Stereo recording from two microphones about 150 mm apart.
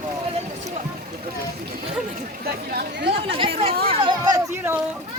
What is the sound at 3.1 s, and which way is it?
Speech, 35° right (ahead or behind).